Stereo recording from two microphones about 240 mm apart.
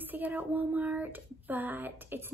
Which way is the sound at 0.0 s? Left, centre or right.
Centre.